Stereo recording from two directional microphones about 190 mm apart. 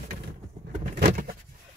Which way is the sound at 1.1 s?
45° right (ahead or behind).